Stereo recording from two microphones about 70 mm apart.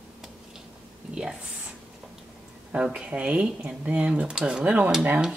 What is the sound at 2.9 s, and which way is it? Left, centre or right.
Speech, centre.